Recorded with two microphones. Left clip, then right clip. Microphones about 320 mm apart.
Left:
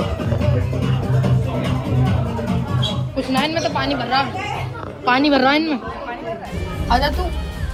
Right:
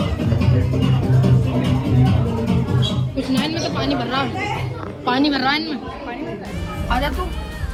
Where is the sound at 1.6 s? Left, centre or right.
Centre.